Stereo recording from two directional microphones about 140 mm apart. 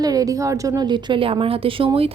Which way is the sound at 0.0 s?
25° right (ahead or behind).